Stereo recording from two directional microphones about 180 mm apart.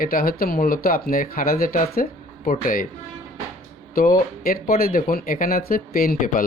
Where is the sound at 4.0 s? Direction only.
55° left (ahead or behind).